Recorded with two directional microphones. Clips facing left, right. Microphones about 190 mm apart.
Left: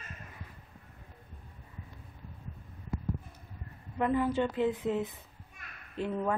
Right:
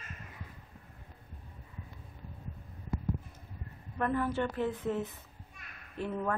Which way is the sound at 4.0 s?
15° left (ahead or behind).